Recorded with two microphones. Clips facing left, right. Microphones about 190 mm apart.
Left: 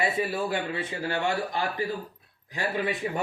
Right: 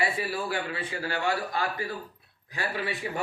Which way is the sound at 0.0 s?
20° left (ahead or behind).